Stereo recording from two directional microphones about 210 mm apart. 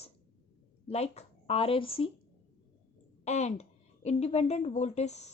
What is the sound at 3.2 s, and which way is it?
A woman's voice, 30° left (ahead or behind).